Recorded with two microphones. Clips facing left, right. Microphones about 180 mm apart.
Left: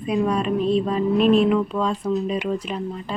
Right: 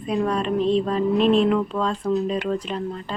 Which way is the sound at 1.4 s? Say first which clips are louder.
Left 1 dB; 10° left (ahead or behind).